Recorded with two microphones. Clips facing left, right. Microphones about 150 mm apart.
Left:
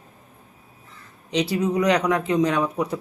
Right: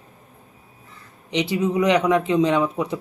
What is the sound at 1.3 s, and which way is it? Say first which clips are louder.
A man's voice: right 1 dB; 20° right (ahead or behind).